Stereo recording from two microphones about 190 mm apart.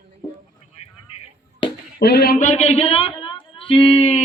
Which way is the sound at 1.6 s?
25° left (ahead or behind).